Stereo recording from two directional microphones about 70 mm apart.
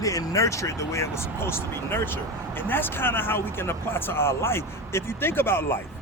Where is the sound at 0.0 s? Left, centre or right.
Left.